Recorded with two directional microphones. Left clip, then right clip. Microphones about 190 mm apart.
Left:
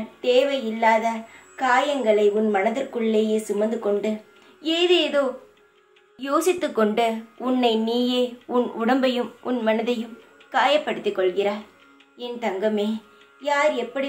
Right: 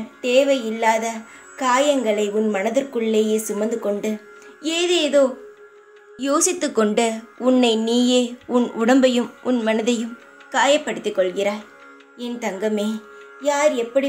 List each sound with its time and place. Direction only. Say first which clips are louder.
0.2 s a woman's voice: right 3 dB; 45° right (ahead or behind)